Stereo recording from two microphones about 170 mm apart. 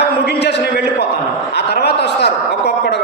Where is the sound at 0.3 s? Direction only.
75° left (ahead or behind).